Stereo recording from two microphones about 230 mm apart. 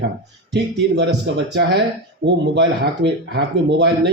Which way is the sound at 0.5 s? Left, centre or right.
Right.